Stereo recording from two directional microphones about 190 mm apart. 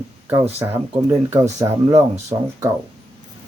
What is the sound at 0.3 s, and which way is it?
Speech, 15° right (ahead or behind).